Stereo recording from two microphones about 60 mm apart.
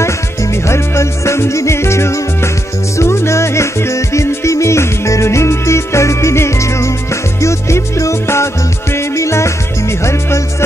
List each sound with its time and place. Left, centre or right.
0.7 s music: left